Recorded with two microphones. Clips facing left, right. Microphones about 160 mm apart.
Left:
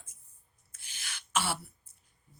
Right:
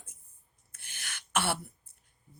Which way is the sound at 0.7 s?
55° right (ahead or behind).